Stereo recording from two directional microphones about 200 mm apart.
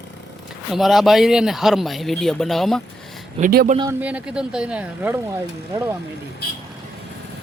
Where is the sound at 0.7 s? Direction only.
Centre (ahead or behind).